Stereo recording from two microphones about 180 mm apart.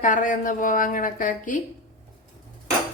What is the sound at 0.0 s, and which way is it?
A woman's voice, 45° left (ahead or behind).